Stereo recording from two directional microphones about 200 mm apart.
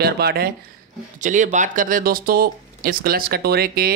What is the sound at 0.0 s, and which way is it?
Speech, 50° right (ahead or behind).